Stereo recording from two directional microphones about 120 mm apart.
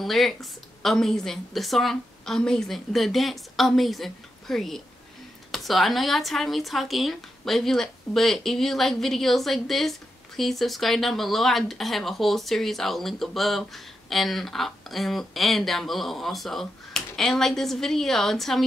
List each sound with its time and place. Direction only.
0.0 s speech: centre (ahead or behind)